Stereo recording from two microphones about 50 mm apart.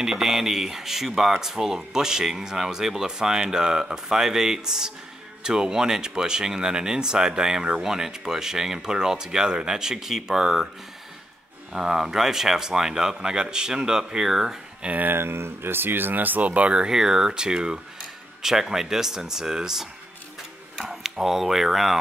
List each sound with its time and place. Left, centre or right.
0.0 s speech: centre
11.7 s speech: centre
15.0 s speech: right
16.8 s speech: centre